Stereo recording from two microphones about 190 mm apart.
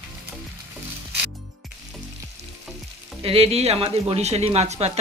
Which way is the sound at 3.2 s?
30° right (ahead or behind).